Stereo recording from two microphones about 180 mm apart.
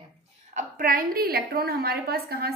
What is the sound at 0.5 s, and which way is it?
A woman's voice, 50° right (ahead or behind).